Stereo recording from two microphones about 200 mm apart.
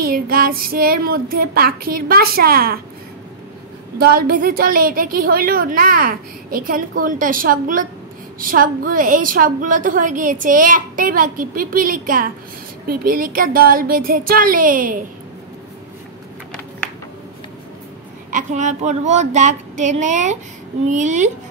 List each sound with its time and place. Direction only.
0.0 s a woman's voice: 45° right (ahead or behind)
4.0 s a woman's voice: 50° right (ahead or behind)
18.3 s speech: 35° right (ahead or behind)